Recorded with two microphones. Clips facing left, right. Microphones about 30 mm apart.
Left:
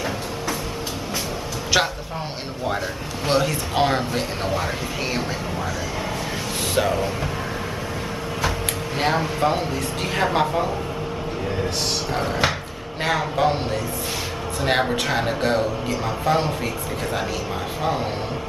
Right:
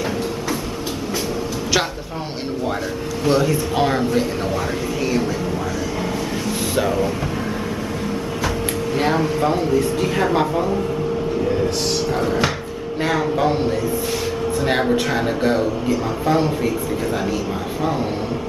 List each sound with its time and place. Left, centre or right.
3.3 s a man's voice: centre
6.7 s music: centre
8.9 s a man's voice: centre
9.5 s a man's voice: centre
12.1 s a man's voice: centre